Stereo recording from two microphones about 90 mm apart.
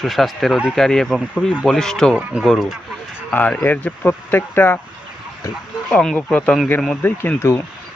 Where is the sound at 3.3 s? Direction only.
10° left (ahead or behind).